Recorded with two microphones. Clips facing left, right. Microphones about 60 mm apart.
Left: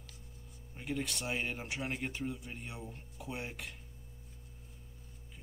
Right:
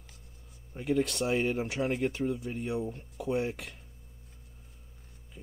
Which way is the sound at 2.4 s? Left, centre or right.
Right.